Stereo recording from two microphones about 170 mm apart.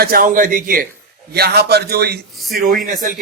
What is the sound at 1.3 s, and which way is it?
Speech, 70° right (ahead or behind).